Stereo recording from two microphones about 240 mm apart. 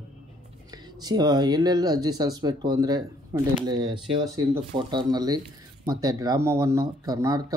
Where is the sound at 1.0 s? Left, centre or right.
Centre.